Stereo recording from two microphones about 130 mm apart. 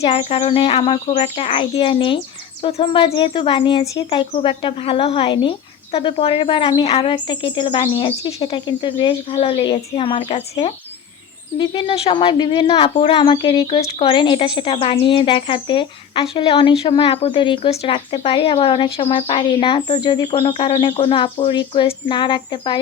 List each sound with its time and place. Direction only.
0.0 s speech: 50° left (ahead or behind)
11.5 s speech: 40° left (ahead or behind)